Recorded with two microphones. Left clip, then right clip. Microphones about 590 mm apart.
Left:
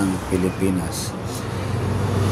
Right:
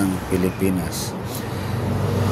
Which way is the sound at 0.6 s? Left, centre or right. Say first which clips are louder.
Even; right.